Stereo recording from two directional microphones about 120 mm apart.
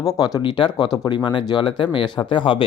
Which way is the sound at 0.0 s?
30° left (ahead or behind).